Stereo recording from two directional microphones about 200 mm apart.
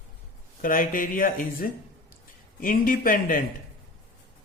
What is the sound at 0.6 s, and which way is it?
Speech, 45° left (ahead or behind).